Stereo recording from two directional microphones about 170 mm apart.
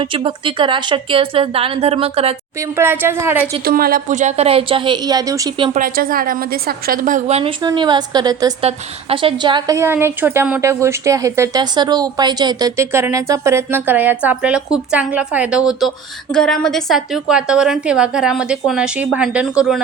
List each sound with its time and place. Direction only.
0.0 s a woman's voice: 30° right (ahead or behind)
2.7 s a woman's voice: 15° right (ahead or behind)
3.7 s a woman's voice: 60° right (ahead or behind); by 5.6 s 20° right (ahead or behind)
5.7 s a woman's voice: 55° right (ahead or behind); by 7.5 s 40° right (ahead or behind)
7.6 s a woman's voice: 25° right (ahead or behind)
8.6 s a woman's voice: 35° right (ahead or behind); by 19.8 s 5° right (ahead or behind)